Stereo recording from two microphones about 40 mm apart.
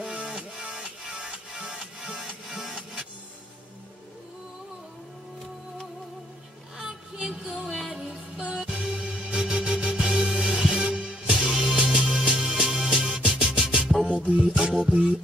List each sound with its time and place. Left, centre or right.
0.0 s music: right
2.4 s music: centre
6.8 s a sound: right
7.2 s music: centre